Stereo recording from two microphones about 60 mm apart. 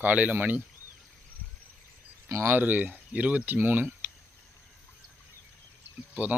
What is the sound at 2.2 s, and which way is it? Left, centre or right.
Speech, right.